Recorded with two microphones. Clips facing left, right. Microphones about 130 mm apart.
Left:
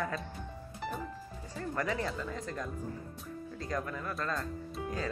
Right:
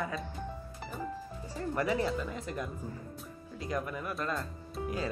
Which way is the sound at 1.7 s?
15° right (ahead or behind).